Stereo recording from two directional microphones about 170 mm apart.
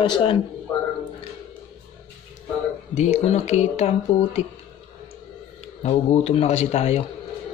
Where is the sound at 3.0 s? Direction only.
40° left (ahead or behind).